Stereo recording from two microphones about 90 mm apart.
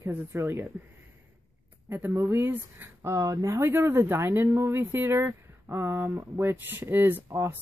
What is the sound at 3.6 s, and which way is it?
Speech, 25° right (ahead or behind).